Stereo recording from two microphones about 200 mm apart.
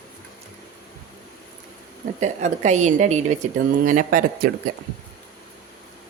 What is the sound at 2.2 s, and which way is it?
A woman's voice, 35° right (ahead or behind).